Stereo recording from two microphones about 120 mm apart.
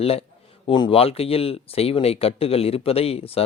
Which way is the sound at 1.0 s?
55° left (ahead or behind).